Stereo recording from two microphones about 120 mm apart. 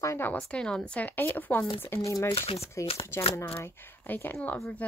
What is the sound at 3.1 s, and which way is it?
A woman's voice, 20° left (ahead or behind).